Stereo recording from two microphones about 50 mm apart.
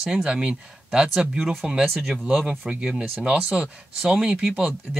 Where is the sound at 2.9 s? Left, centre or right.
Right.